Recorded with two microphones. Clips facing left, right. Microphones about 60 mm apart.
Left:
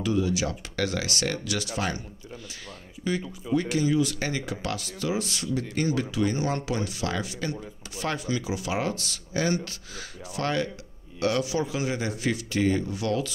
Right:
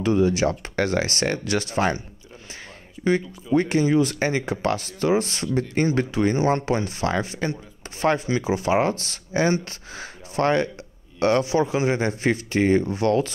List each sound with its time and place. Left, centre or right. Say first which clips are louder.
0.0 s speech: right 6 dB; right
3.5 s speech: right 5 dB; right